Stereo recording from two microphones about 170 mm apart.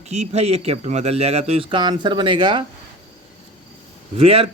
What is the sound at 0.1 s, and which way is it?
A man's voice, 40° right (ahead or behind).